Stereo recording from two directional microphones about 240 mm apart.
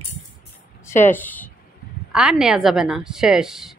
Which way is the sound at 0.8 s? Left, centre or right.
Centre.